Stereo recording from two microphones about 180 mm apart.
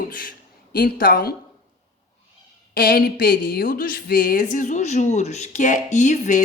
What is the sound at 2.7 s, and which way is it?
Speech, 55° left (ahead or behind).